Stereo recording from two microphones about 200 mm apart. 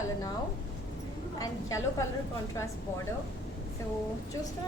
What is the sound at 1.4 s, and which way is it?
Speech, 15° left (ahead or behind).